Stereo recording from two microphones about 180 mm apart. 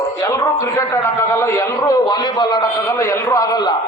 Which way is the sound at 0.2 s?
15° left (ahead or behind).